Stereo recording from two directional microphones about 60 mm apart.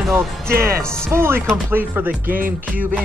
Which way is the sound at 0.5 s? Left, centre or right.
Right.